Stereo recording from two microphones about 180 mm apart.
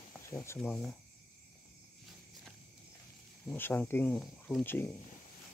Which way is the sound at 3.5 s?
10° left (ahead or behind).